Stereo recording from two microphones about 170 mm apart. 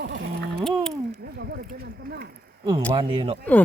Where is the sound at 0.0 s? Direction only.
90° right.